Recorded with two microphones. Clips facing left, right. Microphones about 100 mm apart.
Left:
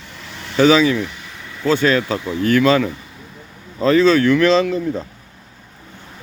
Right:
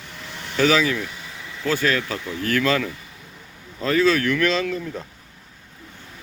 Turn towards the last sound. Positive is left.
turn(degrees=25)  # may be behind; listen again after turning